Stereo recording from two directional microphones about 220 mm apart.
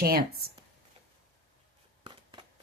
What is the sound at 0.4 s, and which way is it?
Speech, 45° right (ahead or behind).